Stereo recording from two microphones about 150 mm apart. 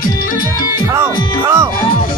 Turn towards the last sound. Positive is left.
turn(degrees=-20)  # may be behind; listen again after turning